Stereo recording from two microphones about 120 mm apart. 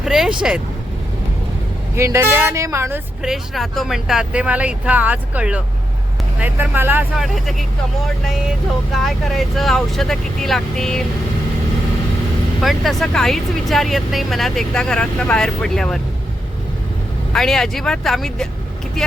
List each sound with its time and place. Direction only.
0.0 s speech: 5° right (ahead or behind)
2.0 s speech: 25° right (ahead or behind)
3.2 s speech: centre (ahead or behind); by 7.0 s 15° right (ahead or behind)
7.2 s speech: centre (ahead or behind)
8.9 s speech: centre (ahead or behind)
12.6 s speech: centre (ahead or behind)
17.3 s speech: 5° left (ahead or behind)